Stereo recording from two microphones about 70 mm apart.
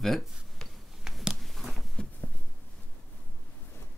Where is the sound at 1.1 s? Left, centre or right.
Centre.